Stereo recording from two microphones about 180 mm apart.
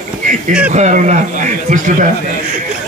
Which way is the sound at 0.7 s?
40° right (ahead or behind).